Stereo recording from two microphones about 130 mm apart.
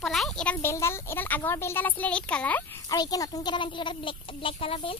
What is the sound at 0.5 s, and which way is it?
Speech, 20° left (ahead or behind).